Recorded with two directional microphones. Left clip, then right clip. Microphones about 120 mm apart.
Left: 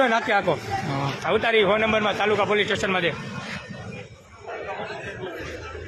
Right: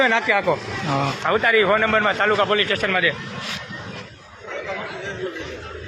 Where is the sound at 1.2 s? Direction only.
30° left (ahead or behind).